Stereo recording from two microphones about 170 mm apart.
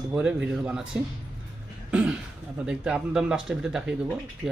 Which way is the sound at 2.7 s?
5° right (ahead or behind).